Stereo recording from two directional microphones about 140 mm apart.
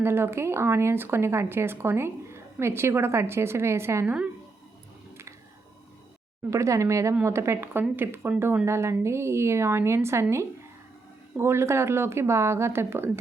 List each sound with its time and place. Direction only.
0.0 s speech: 15° right (ahead or behind)
6.5 s a woman's voice: 20° right (ahead or behind)